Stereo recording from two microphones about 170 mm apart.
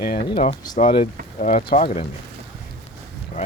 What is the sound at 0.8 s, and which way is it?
Speech, 30° left (ahead or behind).